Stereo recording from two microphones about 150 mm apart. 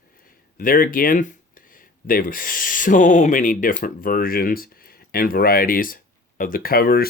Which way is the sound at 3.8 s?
70° left (ahead or behind).